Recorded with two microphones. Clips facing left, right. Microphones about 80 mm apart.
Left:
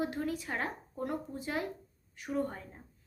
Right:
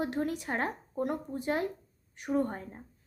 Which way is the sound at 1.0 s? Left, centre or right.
Right.